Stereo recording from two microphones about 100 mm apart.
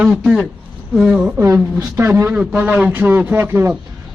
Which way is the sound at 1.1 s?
15° right (ahead or behind).